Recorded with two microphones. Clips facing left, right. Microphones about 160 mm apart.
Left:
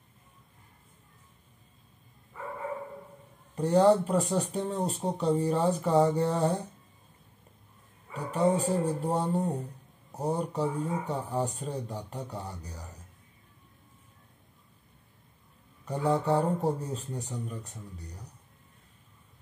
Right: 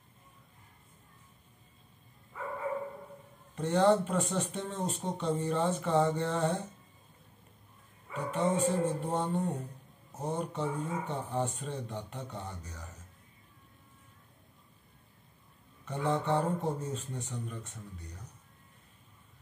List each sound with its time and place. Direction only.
3.5 s speech: 35° left (ahead or behind)
8.1 s speech: 35° left (ahead or behind)
15.8 s speech: 35° left (ahead or behind)